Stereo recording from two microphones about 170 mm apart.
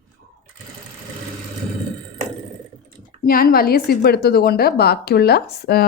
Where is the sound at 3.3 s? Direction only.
60° left (ahead or behind).